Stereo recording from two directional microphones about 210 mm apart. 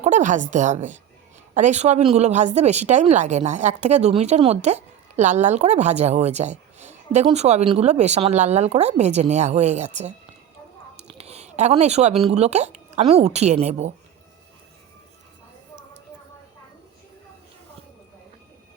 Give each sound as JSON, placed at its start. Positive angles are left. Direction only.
{"t": 0.0, "sound": "speech", "side_deg": -35}
{"t": 11.1, "sound": "a sound", "side_deg": -30}
{"t": 12.2, "sound": "speech", "side_deg": -30}